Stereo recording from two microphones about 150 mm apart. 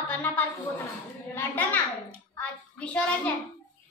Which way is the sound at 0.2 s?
10° left (ahead or behind).